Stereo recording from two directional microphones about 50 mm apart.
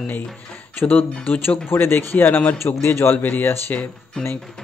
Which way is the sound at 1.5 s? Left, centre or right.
Left.